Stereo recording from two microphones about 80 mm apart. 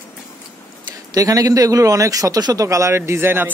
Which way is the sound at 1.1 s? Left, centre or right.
Right.